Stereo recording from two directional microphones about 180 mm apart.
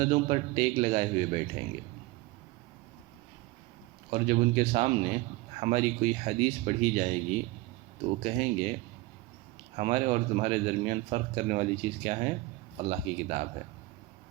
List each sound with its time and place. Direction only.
0.0 s a man's voice: 35° right (ahead or behind)
4.1 s a man's voice: 35° right (ahead or behind)
9.7 s a man's voice: 35° right (ahead or behind)